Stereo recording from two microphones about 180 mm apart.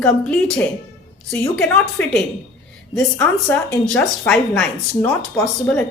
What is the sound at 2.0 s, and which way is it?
Speech, 10° left (ahead or behind).